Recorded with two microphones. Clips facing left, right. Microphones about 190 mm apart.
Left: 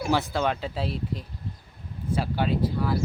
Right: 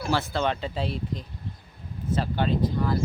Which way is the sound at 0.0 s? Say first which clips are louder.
Left 1 dB; 15° left (ahead or behind).